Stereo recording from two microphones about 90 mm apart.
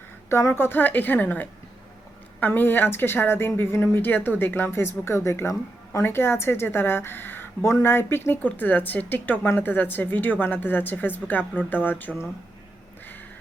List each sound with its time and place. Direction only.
0.3 s speech: 30° left (ahead or behind)